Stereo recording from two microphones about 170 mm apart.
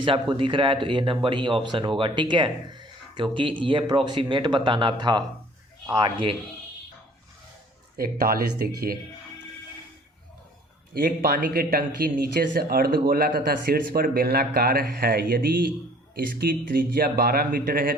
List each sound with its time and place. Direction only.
0.0 s speech: 30° right (ahead or behind)
7.9 s speech: 60° right (ahead or behind)
10.9 s speech: 60° right (ahead or behind)